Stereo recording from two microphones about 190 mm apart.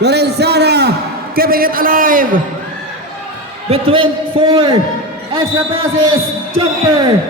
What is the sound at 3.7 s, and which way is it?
A man's voice, 30° right (ahead or behind).